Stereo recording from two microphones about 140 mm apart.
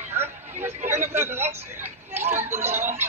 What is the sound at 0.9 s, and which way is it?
Speech, 15° right (ahead or behind).